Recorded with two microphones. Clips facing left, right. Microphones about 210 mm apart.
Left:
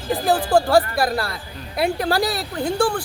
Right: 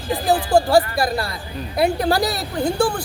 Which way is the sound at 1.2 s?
20° right (ahead or behind).